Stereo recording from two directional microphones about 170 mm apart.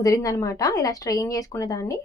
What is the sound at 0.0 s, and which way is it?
Speech, 20° left (ahead or behind).